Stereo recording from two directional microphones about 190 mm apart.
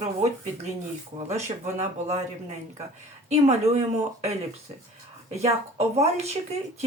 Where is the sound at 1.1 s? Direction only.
35° right (ahead or behind).